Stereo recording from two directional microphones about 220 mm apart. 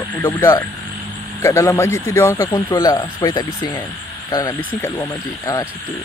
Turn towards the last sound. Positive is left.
turn(degrees=15)  # may be behind; listen again after turning